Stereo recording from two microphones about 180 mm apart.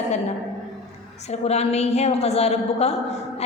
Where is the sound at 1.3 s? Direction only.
35° left (ahead or behind).